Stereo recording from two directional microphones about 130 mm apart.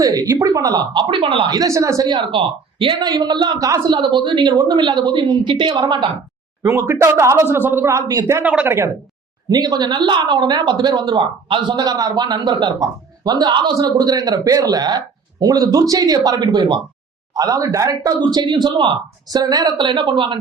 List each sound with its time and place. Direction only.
0.0 s a man's voice: 30° right (ahead or behind); by 1.5 s 45° right (ahead or behind)
1.5 s a man's voice: 25° right (ahead or behind)
6.6 s speech: 20° right (ahead or behind)
9.5 s a man's voice: 30° right (ahead or behind)
11.8 s a man's voice: 30° right (ahead or behind)